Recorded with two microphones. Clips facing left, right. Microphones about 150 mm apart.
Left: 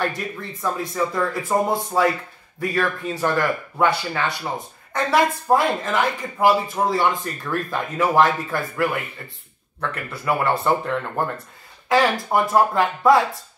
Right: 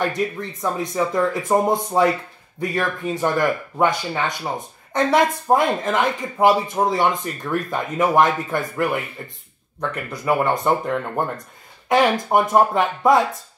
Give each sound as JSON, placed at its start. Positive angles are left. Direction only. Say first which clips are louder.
{"t": 0.0, "sound": "speech", "louder": "right 3 dB", "side_deg": -20}